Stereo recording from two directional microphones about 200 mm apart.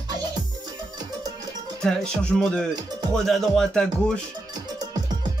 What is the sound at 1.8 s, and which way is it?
Speech, 5° left (ahead or behind).